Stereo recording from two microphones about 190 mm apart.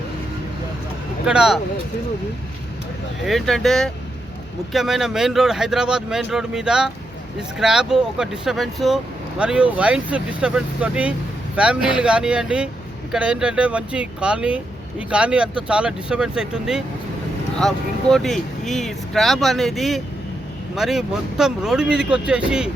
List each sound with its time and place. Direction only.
1.2 s speech: 5° right (ahead or behind)
3.2 s speech: centre (ahead or behind)